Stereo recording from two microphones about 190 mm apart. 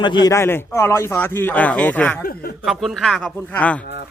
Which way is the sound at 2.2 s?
50° left (ahead or behind).